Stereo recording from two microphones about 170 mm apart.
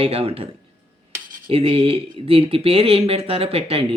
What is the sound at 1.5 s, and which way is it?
Speech, 35° right (ahead or behind).